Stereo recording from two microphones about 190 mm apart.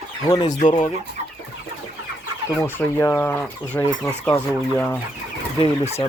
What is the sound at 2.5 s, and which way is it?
Speech, 10° left (ahead or behind).